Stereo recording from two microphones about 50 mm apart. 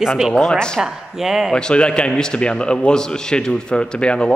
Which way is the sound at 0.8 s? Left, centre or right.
Centre.